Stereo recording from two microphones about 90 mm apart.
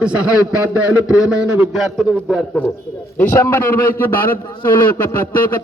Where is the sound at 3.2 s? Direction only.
25° left (ahead or behind).